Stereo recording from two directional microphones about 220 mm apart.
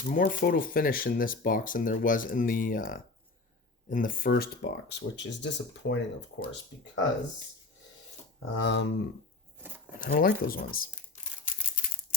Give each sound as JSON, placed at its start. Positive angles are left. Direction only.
{"t": 0.1, "sound": "speech", "side_deg": 40}
{"t": 8.4, "sound": "speech", "side_deg": 55}
{"t": 10.0, "sound": "speech", "side_deg": 40}